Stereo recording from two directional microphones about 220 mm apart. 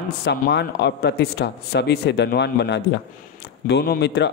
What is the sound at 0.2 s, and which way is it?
A man's voice, 50° left (ahead or behind).